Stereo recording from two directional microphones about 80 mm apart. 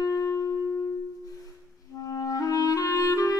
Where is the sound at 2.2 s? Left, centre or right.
Left.